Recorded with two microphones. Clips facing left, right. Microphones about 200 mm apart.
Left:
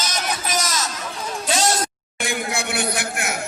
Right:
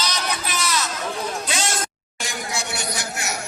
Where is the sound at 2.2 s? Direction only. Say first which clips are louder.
Left 4 dB; 55° left (ahead or behind).